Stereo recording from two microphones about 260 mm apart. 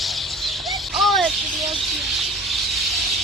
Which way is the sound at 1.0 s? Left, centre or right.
Centre.